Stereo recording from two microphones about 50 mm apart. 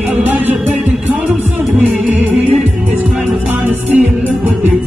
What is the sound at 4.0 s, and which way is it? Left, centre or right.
Music, right.